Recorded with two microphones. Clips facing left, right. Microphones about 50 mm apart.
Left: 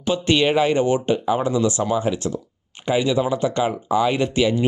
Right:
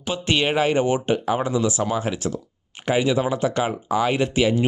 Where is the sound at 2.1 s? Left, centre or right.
Right.